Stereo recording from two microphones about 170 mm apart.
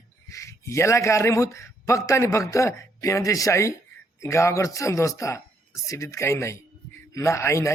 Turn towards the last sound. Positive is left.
turn(degrees=15)  # may be behind; listen again after turning